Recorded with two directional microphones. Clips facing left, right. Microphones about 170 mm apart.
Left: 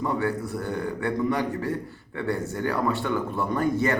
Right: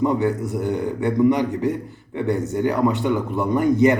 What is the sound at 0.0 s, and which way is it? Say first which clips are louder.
A man's voice: right 6 dB; 20° right (ahead or behind).